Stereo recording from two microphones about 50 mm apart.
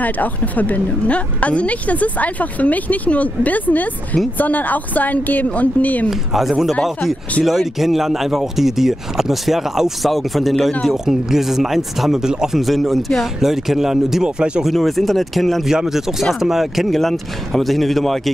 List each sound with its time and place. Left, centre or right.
0.0 s a woman's voice: left
6.0 s speech: centre
12.6 s speech: centre
14.2 s speech: centre
14.6 s speech: centre
15.7 s speech: centre